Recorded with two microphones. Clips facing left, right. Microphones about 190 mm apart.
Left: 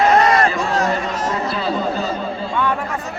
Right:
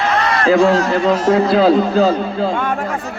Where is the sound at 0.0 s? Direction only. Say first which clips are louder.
Left 4 dB; 40° left (ahead or behind).